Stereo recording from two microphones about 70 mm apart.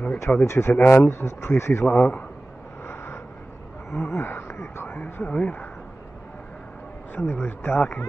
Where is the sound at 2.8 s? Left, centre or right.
Left.